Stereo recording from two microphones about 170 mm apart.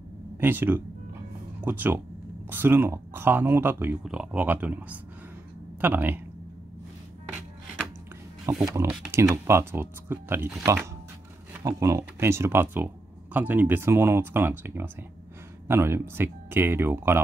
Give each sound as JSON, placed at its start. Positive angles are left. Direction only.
{"t": 0.4, "sound": "speech", "side_deg": -10}
{"t": 8.5, "sound": "speech", "side_deg": -15}